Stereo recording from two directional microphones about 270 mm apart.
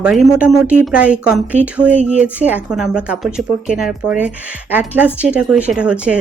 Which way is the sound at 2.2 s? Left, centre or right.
Centre.